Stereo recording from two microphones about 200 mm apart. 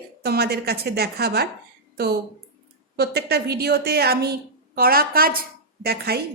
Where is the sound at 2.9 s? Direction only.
50° right (ahead or behind).